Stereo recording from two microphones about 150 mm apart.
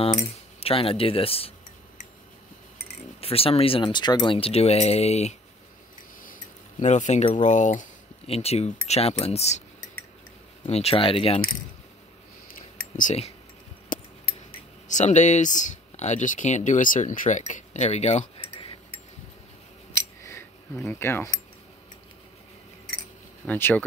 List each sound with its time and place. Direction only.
0.3 s speech: 40° left (ahead or behind)
3.2 s speech: 40° left (ahead or behind)
6.8 s speech: 50° left (ahead or behind)
8.3 s speech: 45° left (ahead or behind)
10.7 s speech: 45° left (ahead or behind)
12.4 s a sound: 65° left (ahead or behind)
14.9 s speech: 50° left (ahead or behind)
20.2 s a sound: 15° left (ahead or behind)
23.4 s speech: 10° left (ahead or behind)